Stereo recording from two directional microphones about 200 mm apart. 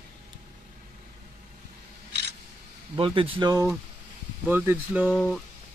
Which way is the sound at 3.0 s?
25° right (ahead or behind).